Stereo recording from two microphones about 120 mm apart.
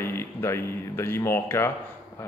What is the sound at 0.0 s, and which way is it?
Speech, 20° left (ahead or behind).